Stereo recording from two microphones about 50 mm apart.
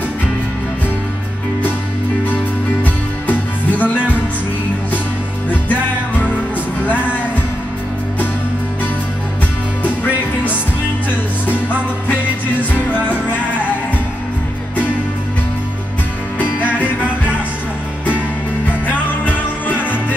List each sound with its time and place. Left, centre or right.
2.8 s music: left
12.7 s music: right
16.6 s music: right